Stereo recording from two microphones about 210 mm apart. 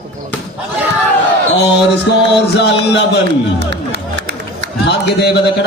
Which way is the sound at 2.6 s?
55° left (ahead or behind).